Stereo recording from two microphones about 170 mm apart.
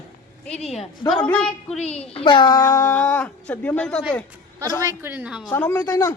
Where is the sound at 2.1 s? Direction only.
30° left (ahead or behind).